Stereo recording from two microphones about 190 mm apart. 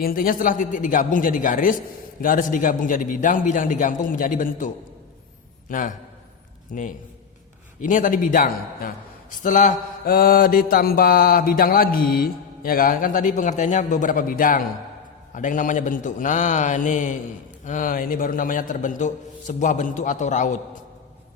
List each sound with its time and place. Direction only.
0.0 s mantra: 50° left (ahead or behind)
15.4 s a man's voice: 45° left (ahead or behind)
17.7 s mantra: 45° left (ahead or behind)